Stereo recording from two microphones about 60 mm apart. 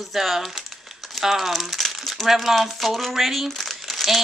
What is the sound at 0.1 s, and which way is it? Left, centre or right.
Speech, centre.